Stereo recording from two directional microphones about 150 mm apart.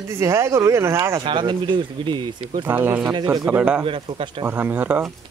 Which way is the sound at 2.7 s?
10° right (ahead or behind).